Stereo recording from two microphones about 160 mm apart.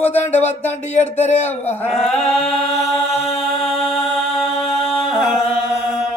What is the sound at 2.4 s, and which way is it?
Chant, 40° left (ahead or behind).